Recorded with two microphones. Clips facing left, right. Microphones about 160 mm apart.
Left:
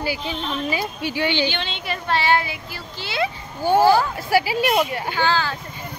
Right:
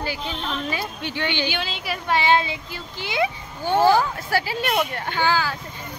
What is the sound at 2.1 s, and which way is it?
Speech, 20° right (ahead or behind).